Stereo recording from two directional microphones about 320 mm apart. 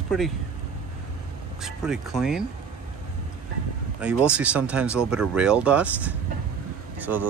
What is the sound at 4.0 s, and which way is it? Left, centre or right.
Speech, centre.